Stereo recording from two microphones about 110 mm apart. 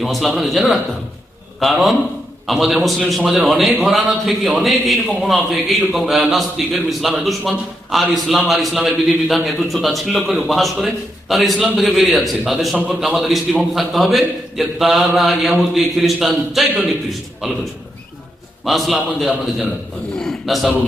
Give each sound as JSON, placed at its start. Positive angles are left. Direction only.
{"t": 0.0, "sound": "a man's voice", "side_deg": 0}
{"t": 18.6, "sound": "a man's voice", "side_deg": 0}